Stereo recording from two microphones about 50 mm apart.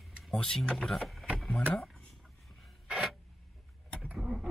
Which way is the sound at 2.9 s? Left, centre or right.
Centre.